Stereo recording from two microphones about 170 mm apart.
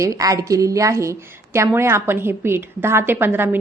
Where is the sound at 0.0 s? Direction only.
20° right (ahead or behind).